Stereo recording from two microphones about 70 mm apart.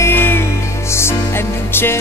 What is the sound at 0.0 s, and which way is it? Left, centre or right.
Music, left.